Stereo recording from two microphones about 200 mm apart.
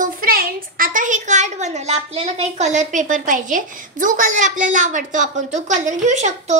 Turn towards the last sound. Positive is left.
turn(degrees=-35)  # may be behind; listen again after turning